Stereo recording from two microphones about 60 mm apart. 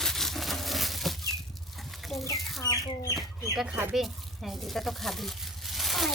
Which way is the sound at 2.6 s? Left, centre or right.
Left.